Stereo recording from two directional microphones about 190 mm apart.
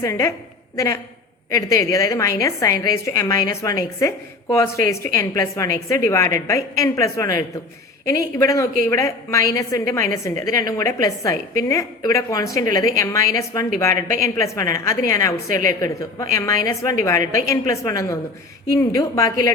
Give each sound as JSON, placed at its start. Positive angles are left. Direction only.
{"t": 0.0, "sound": "a woman's voice", "side_deg": 15}
{"t": 1.5, "sound": "a woman's voice", "side_deg": 15}